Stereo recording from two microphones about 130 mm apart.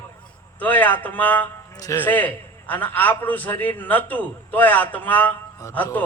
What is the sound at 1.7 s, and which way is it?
Music, 30° left (ahead or behind).